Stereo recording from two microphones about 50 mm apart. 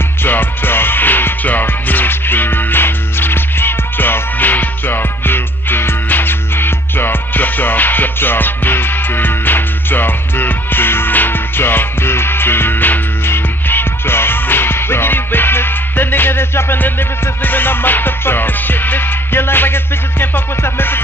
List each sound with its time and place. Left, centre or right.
0.2 s music: left